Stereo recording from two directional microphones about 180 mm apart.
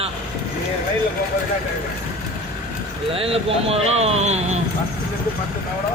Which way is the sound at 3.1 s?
30° right (ahead or behind).